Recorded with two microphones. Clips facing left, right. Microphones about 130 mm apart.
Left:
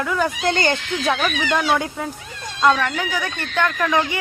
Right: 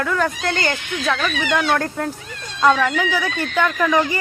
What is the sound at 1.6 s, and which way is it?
Speech, 5° left (ahead or behind).